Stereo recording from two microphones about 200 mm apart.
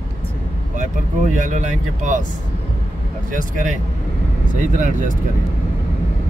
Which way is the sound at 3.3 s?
40° right (ahead or behind).